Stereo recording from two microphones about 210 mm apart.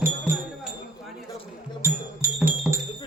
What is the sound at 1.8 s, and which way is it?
Music, 10° right (ahead or behind).